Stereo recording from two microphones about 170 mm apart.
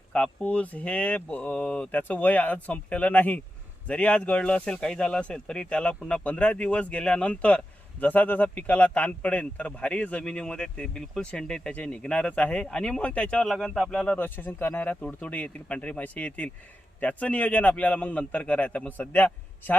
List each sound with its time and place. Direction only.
0.1 s speech: 5° left (ahead or behind)